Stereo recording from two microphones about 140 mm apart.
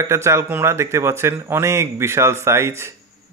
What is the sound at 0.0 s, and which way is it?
Speech, 20° right (ahead or behind).